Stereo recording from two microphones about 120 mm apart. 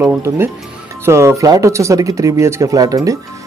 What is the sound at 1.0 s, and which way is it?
Speech, 20° right (ahead or behind).